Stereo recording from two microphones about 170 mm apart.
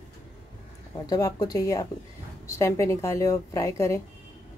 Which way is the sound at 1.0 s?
20° left (ahead or behind).